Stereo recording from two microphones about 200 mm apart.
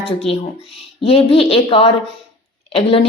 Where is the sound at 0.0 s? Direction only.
30° left (ahead or behind).